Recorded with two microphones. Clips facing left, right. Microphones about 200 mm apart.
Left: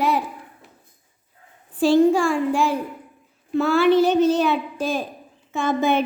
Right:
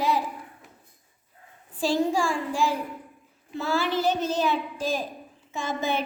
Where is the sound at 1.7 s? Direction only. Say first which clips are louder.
Left 8 dB; 60° left (ahead or behind).